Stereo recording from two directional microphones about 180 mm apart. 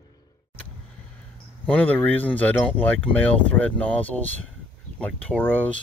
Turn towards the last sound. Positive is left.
turn(degrees=10)  # may be behind; listen again after turning